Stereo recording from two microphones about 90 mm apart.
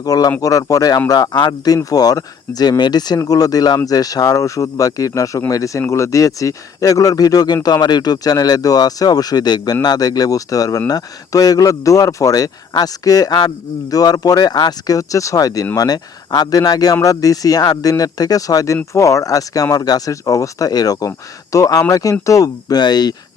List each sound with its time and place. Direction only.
0.0 s a man's voice: 45° left (ahead or behind)